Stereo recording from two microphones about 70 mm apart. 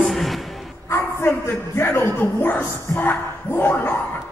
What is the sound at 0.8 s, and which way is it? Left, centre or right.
A man's voice, left.